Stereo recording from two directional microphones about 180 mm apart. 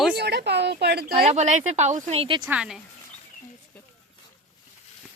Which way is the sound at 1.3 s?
40° right (ahead or behind).